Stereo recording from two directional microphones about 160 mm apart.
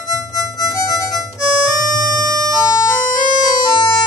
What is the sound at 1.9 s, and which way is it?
Music, 55° left (ahead or behind).